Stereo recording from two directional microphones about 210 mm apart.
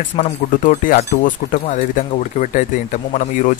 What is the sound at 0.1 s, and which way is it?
Speech, 35° left (ahead or behind).